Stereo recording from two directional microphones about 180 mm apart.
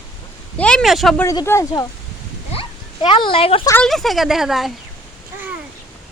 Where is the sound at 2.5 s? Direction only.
30° left (ahead or behind).